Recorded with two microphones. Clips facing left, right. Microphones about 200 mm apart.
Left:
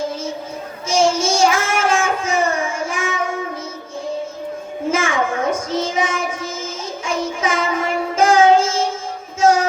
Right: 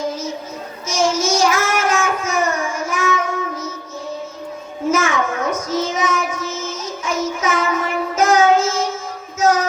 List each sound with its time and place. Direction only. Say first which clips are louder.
0.9 s child singing: left 2 dB; 30° left (ahead or behind)
4.9 s child singing: right 1 dB; 30° left (ahead or behind)
9.4 s music: left 2 dB; 30° left (ahead or behind)